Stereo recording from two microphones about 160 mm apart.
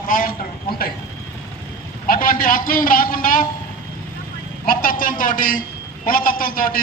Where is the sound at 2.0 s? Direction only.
60° left (ahead or behind).